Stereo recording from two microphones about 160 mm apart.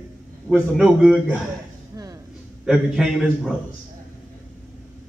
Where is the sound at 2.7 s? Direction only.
5° right (ahead or behind).